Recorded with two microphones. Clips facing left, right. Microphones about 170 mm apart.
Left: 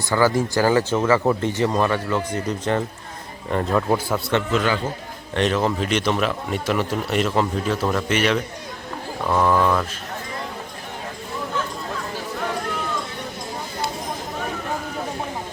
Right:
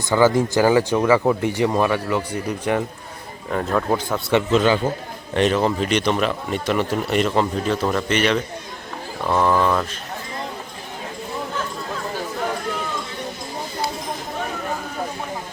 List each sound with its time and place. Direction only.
0.1 s speech: 20° right (ahead or behind)
3.5 s speech: centre (ahead or behind)
4.3 s speech: 20° right (ahead or behind)
5.3 s speech: 5° right (ahead or behind)